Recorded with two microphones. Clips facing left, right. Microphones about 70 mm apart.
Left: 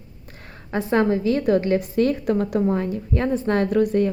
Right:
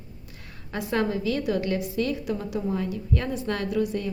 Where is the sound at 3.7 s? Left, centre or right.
Left.